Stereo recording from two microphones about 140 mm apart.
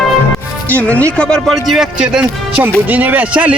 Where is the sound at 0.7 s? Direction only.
10° left (ahead or behind).